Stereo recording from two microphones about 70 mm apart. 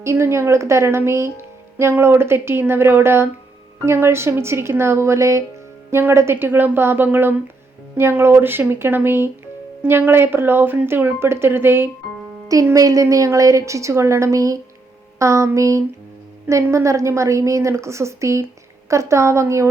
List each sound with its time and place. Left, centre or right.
0.0 s speech: right
12.7 s a woman's voice: right